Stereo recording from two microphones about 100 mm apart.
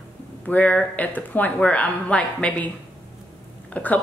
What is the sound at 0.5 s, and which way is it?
Speech, 15° left (ahead or behind).